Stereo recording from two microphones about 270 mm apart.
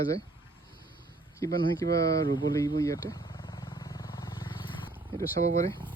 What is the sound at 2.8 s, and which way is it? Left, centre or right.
Vehicle, centre.